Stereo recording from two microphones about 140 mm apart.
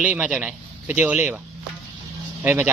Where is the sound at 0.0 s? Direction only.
10° right (ahead or behind).